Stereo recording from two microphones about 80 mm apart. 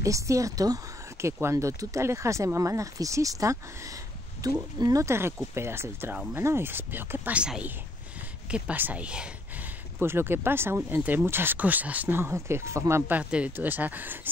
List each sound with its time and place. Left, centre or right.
0.0 s a woman's voice: right
5.0 s speech: right
7.3 s speech: centre
9.9 s speech: right
13.1 s speech: centre